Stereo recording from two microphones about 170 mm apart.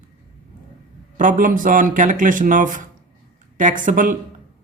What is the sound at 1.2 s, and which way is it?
Speech, 50° right (ahead or behind).